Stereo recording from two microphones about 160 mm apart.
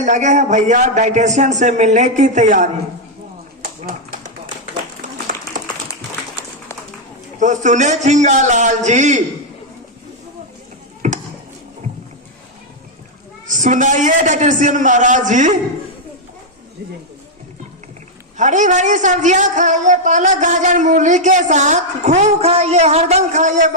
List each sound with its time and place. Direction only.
0.0 s a man's voice: 50° right (ahead or behind)
5.1 s a sound: 50° right (ahead or behind)
7.3 s a man's voice: 50° right (ahead or behind)
11.0 s a sound: 50° right (ahead or behind)
13.5 s a man's voice: 50° right (ahead or behind)
18.3 s a man's voice: 50° right (ahead or behind)